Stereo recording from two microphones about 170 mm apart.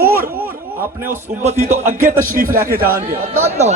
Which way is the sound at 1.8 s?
55° right (ahead or behind).